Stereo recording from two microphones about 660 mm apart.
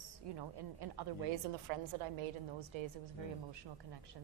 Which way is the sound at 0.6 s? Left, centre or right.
Right.